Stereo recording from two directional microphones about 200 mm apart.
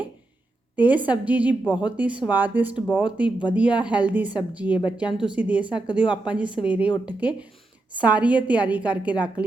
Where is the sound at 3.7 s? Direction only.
5° right (ahead or behind).